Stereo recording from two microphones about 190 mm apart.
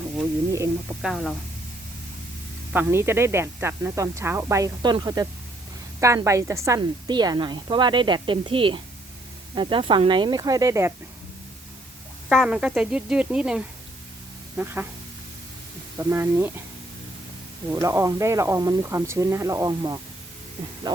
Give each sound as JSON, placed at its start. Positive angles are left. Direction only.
{"t": 0.2, "sound": "speech", "side_deg": -15}
{"t": 1.0, "sound": "speech", "side_deg": 0}
{"t": 2.7, "sound": "a woman's voice", "side_deg": -15}
{"t": 12.3, "sound": "speech", "side_deg": -5}
{"t": 14.6, "sound": "speech", "side_deg": -10}
{"t": 16.0, "sound": "speech", "side_deg": -10}
{"t": 17.7, "sound": "a woman's voice", "side_deg": -15}